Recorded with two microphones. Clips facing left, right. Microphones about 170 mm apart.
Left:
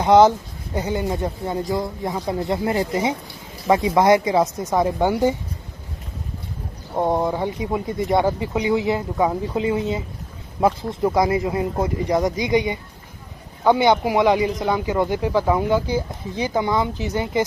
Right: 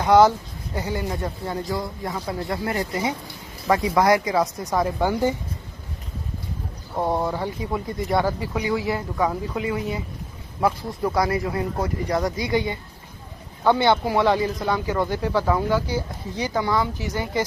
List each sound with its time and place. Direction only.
0.0 s speech: 20° left (ahead or behind)
7.0 s speech: 20° left (ahead or behind)